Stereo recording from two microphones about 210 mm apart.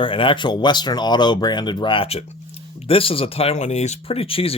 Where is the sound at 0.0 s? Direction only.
25° left (ahead or behind).